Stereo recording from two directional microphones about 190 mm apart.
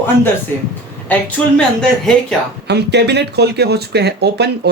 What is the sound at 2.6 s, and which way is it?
Speech, 60° right (ahead or behind).